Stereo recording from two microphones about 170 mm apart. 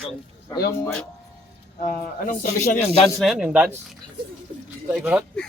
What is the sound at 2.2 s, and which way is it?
Speech, 55° left (ahead or behind).